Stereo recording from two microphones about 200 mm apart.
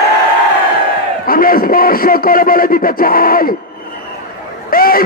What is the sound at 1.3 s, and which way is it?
Speech, 45° left (ahead or behind).